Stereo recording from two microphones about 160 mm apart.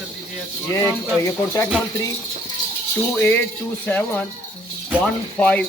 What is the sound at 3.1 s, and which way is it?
A man's voice, 15° left (ahead or behind).